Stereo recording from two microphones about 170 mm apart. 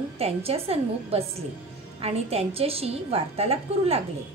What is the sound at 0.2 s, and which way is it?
A woman's voice, 35° right (ahead or behind).